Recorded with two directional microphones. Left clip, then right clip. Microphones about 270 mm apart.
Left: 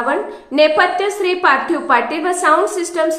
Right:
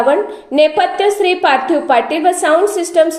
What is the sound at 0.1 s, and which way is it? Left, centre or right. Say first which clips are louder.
A woman's voice: right 5 dB; centre.